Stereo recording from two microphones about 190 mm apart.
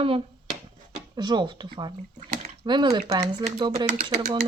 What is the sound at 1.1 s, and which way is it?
Speech, 20° right (ahead or behind).